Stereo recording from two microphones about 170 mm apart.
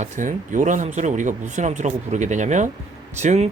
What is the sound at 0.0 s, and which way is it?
Speech, 50° right (ahead or behind).